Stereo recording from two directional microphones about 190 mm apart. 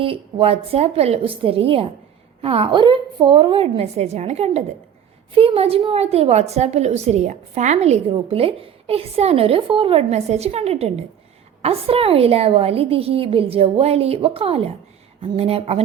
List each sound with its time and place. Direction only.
0.0 s a woman's voice: 30° right (ahead or behind)